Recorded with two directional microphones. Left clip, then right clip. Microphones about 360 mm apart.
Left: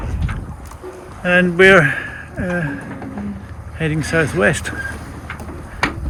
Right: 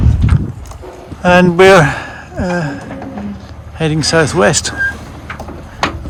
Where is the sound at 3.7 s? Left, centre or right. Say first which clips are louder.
Right 6 dB; centre.